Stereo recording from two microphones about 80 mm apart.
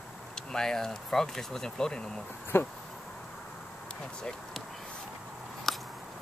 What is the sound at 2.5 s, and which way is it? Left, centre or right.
Speech, left.